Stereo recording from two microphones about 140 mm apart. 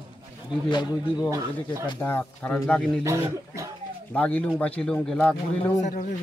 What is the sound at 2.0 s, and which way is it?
Speech, 15° left (ahead or behind).